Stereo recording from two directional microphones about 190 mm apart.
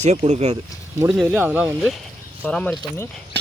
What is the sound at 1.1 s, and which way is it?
Speech, 10° right (ahead or behind).